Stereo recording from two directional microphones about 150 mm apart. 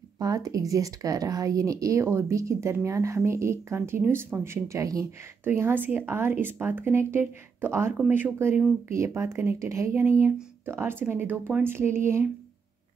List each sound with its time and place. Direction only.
0.2 s speech: 25° right (ahead or behind)